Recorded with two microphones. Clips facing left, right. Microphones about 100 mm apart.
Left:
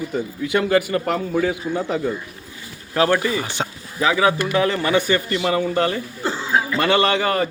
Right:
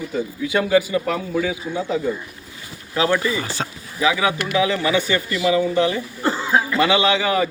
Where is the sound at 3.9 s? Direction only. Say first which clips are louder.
Left 2 dB; 40° left (ahead or behind).